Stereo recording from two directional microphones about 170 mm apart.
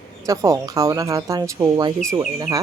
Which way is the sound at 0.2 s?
20° right (ahead or behind).